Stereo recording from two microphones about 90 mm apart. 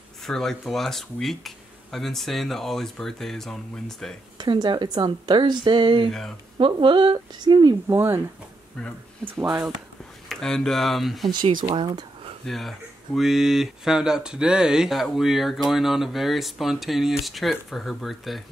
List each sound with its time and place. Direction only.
0.3 s speech: 5° left (ahead or behind)
4.4 s speech: 55° right (ahead or behind)
6.0 s speech: 5° left (ahead or behind)
6.6 s speech: 65° right (ahead or behind); by 7.7 s 50° right (ahead or behind)
7.9 s speech: 25° right (ahead or behind)
9.2 s speech: 20° right (ahead or behind)
10.2 s speech: 5° left (ahead or behind)
11.2 s speech: 70° right (ahead or behind)
12.4 s speech: centre (ahead or behind)